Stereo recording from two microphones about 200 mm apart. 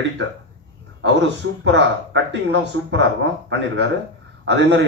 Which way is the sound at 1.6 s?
65° right (ahead or behind).